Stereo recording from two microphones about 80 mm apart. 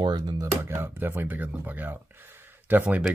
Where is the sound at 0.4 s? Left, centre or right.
Right.